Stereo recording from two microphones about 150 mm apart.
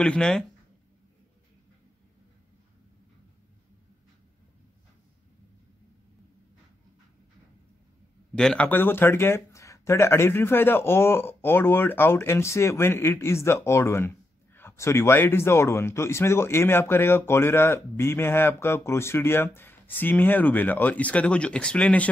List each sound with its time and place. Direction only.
0.0 s speech: 5° left (ahead or behind)
8.4 s speech: 5° left (ahead or behind)